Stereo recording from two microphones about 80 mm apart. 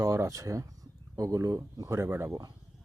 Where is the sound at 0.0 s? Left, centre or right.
Right.